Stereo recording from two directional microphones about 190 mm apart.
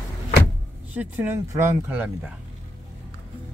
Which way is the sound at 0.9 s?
10° right (ahead or behind).